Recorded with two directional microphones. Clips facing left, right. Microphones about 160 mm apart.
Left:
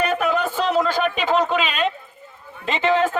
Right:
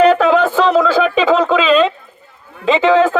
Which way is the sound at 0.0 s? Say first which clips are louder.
Right 10 dB; 90° right.